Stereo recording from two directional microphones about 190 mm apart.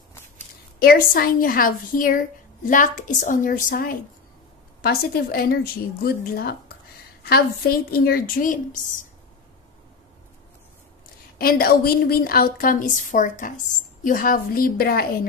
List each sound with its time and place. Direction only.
0.7 s a woman's voice: 50° left (ahead or behind)
11.3 s a woman's voice: 50° left (ahead or behind)